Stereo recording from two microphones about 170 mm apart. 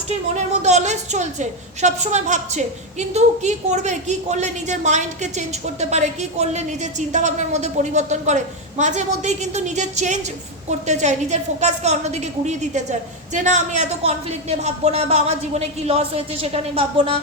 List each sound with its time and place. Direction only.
0.3 s a woman's voice: 45° right (ahead or behind)